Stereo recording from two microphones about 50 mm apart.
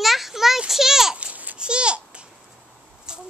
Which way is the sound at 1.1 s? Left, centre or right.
Right.